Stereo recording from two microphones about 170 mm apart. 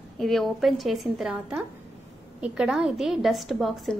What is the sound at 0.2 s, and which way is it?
A woman's voice, centre (ahead or behind).